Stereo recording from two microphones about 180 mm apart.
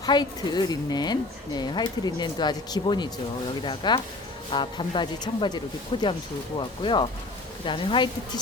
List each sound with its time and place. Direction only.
0.0 s speech: 25° left (ahead or behind)